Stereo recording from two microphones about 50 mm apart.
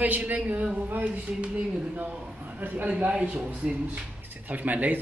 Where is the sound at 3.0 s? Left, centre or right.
Right.